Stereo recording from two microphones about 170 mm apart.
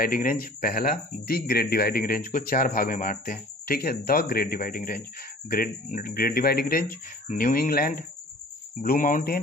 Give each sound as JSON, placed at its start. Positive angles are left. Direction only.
{"t": 0.0, "sound": "speech", "side_deg": 55}